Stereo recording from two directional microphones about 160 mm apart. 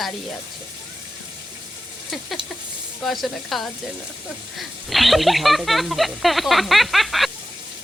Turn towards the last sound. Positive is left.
turn(degrees=0)  # may be behind; listen again after turning